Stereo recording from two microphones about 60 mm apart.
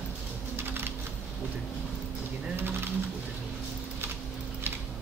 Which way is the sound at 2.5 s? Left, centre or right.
Right.